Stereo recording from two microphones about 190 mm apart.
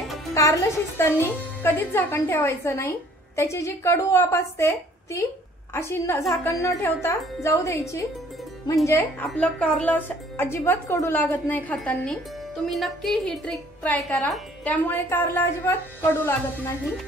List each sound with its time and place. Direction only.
0.3 s a woman's voice: 15° left (ahead or behind)